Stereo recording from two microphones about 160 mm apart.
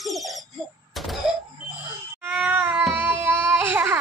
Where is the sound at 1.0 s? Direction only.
Centre (ahead or behind).